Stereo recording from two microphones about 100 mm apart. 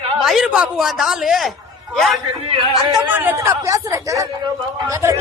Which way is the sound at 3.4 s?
30° right (ahead or behind).